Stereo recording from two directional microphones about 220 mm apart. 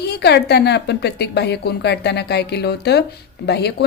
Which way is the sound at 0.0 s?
50° left (ahead or behind).